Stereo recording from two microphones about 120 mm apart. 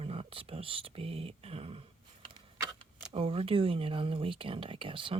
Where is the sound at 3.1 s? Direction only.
50° right (ahead or behind).